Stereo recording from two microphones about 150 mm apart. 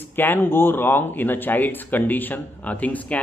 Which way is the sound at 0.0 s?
15° left (ahead or behind).